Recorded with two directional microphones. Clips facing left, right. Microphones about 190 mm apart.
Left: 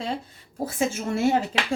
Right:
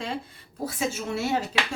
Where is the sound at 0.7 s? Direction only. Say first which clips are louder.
Left 4 dB; 50° left (ahead or behind).